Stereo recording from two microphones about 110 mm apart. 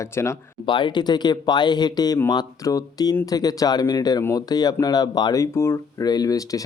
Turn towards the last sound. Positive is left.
turn(degrees=30)  # may be behind; listen again after turning